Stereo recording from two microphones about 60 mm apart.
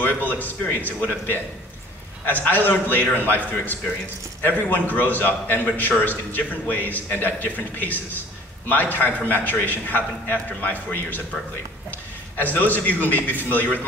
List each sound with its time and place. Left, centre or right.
0.0 s speech: left
4.4 s a man's voice: left
12.4 s speech: left